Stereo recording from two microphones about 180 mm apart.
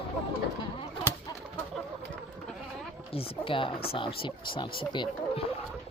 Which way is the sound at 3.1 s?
30° left (ahead or behind).